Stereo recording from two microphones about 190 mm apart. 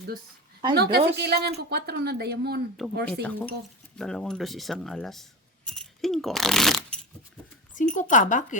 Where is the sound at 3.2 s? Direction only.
5° left (ahead or behind).